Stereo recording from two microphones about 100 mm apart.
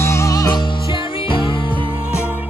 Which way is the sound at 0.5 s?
50° left (ahead or behind).